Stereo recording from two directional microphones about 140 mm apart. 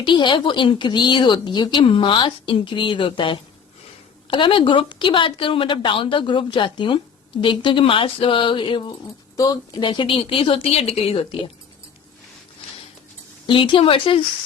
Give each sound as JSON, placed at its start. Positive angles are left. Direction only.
{"t": 0.0, "sound": "a woman's voice", "side_deg": 35}
{"t": 9.3, "sound": "a woman's voice", "side_deg": 25}
{"t": 13.5, "sound": "a woman's voice", "side_deg": 35}